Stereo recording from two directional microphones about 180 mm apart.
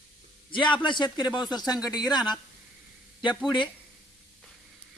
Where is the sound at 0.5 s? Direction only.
25° left (ahead or behind).